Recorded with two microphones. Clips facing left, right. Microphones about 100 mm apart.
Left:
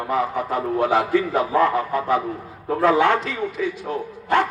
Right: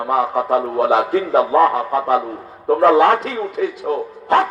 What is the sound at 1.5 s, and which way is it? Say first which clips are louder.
A man's voice: right 4 dB; 60° right (ahead or behind).